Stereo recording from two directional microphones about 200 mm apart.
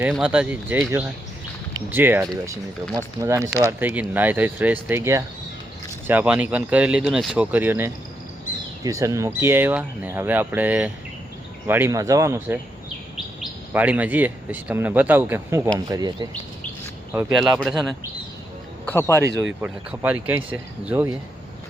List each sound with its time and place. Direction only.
0.1 s speech: 5° right (ahead or behind)
17.6 s speech: centre (ahead or behind)
18.9 s speech: 10° left (ahead or behind)
19.6 s speech: 10° right (ahead or behind)